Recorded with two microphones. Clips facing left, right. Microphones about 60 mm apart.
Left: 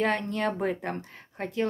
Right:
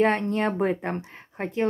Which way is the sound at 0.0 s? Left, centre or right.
Right.